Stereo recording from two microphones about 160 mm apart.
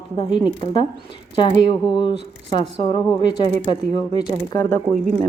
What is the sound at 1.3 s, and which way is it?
Speech, 30° left (ahead or behind).